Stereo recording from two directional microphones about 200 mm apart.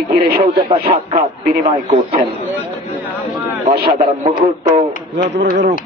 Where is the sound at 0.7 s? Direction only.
25° right (ahead or behind).